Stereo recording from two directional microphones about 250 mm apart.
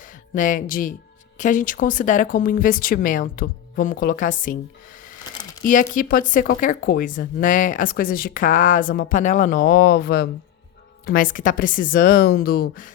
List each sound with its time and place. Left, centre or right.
0.3 s speech: left
5.6 s speech: left